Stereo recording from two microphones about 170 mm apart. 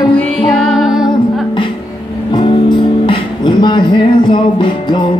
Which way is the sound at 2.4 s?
30° left (ahead or behind).